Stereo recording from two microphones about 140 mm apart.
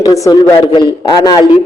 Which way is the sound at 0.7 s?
30° left (ahead or behind).